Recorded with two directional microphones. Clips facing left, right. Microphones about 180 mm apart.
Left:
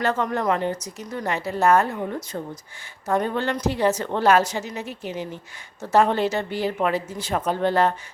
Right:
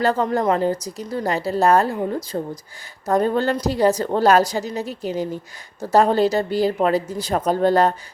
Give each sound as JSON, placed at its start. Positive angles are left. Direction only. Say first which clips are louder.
{"t": 0.0, "sound": "speech", "louder": "right 4 dB", "side_deg": -35}